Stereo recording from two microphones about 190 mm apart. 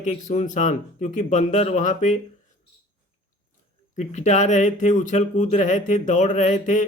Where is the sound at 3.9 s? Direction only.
40° left (ahead or behind).